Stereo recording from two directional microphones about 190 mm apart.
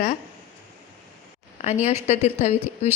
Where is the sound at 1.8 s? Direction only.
35° left (ahead or behind).